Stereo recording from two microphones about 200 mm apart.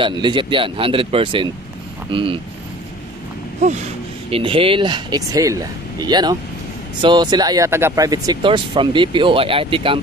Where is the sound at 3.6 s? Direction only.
35° right (ahead or behind).